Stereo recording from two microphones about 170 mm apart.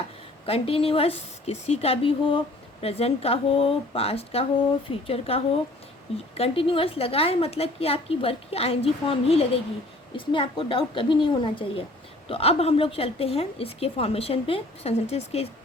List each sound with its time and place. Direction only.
0.4 s a woman's voice: 35° left (ahead or behind)